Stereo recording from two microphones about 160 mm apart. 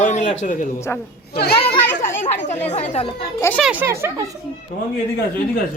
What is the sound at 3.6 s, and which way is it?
Speech, 10° right (ahead or behind).